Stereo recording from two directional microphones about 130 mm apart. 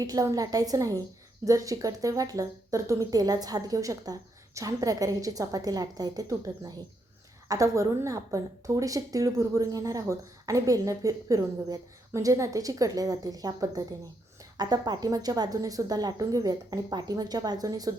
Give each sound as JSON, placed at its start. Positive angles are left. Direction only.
{"t": 0.0, "sound": "a woman's voice", "side_deg": -30}